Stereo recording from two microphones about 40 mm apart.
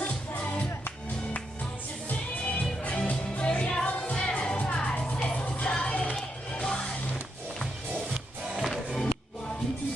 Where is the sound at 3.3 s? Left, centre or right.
Left.